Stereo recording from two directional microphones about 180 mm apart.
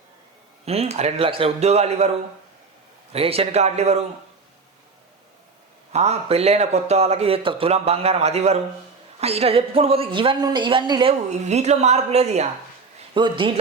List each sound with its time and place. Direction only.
0.6 s a man's voice: 35° right (ahead or behind)
5.9 s a man's voice: 35° right (ahead or behind)
11.3 s a man's voice: 40° right (ahead or behind)
13.1 s speech: 25° right (ahead or behind)